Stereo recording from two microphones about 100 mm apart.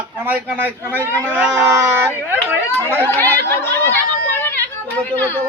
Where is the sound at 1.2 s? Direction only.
15° right (ahead or behind).